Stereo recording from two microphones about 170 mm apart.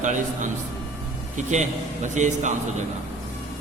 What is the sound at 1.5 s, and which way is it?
Speech, 45° right (ahead or behind).